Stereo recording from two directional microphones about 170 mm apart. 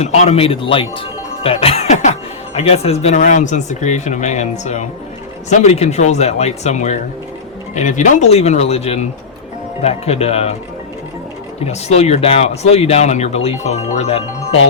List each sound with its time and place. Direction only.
0.0 s speech: 40° left (ahead or behind)
11.6 s speech: 40° left (ahead or behind)